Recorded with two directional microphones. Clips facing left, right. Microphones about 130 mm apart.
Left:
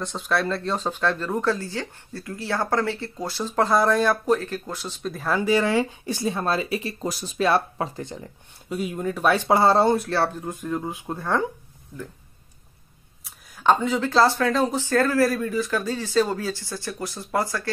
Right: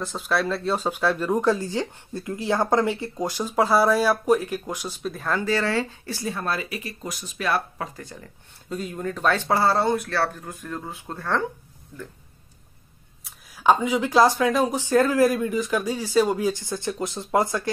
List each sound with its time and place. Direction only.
0.0 s speech: centre (ahead or behind)
5.1 s speech: centre (ahead or behind)
5.4 s speech: 15° left (ahead or behind)
8.6 s speech: 10° left (ahead or behind)
13.2 s speech: 5° right (ahead or behind)